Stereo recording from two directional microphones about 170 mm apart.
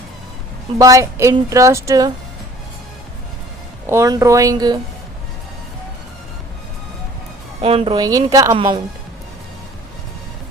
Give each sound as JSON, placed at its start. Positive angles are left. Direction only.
{"t": 0.8, "sound": "speech", "side_deg": -20}
{"t": 3.8, "sound": "speech", "side_deg": -15}
{"t": 7.6, "sound": "speech", "side_deg": -35}